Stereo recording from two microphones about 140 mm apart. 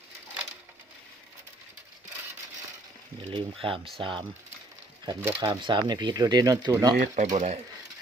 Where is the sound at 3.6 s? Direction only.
40° right (ahead or behind).